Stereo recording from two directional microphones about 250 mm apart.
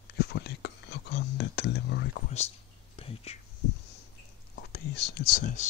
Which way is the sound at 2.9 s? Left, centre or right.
Left.